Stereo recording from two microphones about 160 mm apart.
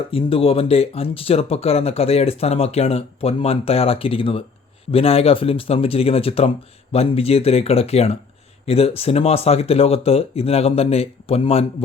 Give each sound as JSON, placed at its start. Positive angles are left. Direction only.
{"t": 0.1, "sound": "speech", "side_deg": 35}